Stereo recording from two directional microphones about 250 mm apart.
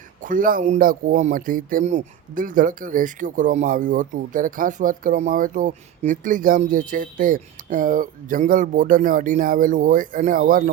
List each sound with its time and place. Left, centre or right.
0.2 s speech: right